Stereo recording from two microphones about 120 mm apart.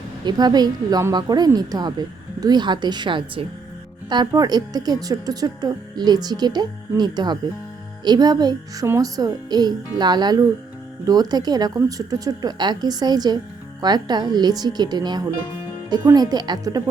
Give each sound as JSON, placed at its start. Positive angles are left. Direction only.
{"t": 0.3, "sound": "speech", "side_deg": -35}